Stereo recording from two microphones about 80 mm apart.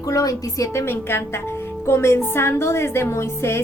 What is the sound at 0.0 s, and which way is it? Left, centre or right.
A woman's voice, left.